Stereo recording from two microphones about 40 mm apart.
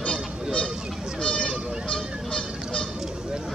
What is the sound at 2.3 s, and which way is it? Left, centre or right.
Honk, left.